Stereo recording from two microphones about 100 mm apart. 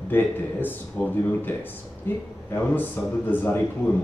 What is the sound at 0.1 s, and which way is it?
Speech, 20° left (ahead or behind).